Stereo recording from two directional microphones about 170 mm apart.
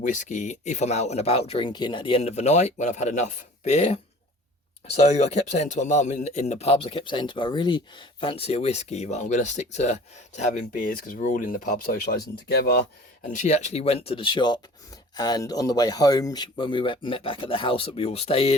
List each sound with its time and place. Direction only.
0.0 s speech: 50° left (ahead or behind)
5.0 s speech: 40° left (ahead or behind); by 12.8 s 70° left (ahead or behind)
13.3 s speech: 45° left (ahead or behind)